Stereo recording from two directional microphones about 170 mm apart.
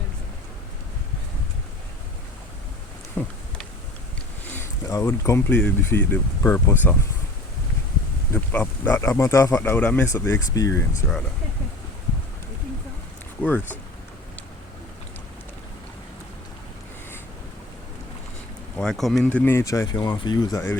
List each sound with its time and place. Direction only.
3.2 s speech: 15° left (ahead or behind)
4.4 s speech: 15° left (ahead or behind)
8.3 s speech: 10° left (ahead or behind)
13.4 s speech: 10° left (ahead or behind)
18.8 s speech: centre (ahead or behind); by 20.7 s 25° left (ahead or behind)